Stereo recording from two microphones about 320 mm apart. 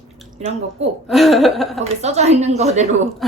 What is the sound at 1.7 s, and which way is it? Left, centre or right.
A woman's voice, right.